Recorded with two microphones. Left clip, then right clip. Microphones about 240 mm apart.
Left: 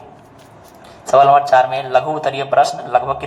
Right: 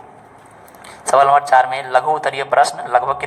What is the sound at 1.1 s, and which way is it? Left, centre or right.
A man's voice, right.